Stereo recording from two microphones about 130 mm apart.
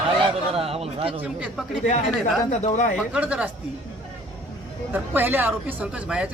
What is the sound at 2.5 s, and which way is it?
Speech, 70° left (ahead or behind).